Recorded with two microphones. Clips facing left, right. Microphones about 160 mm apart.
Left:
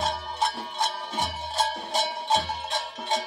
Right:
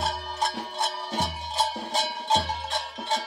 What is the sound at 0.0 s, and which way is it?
Music, centre (ahead or behind).